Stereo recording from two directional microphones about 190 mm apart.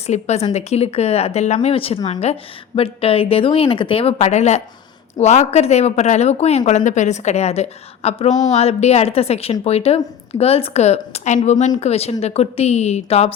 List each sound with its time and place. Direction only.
0.0 s speech: 35° left (ahead or behind)